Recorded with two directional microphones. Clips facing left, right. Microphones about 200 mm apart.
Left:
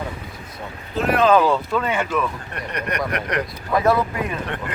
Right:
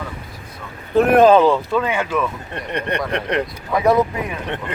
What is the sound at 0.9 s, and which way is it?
Speech, 55° right (ahead or behind).